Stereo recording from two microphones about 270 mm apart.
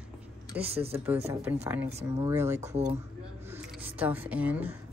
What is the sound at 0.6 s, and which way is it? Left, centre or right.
Speech, right.